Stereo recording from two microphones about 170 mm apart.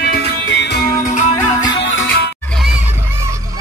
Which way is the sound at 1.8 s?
90° left.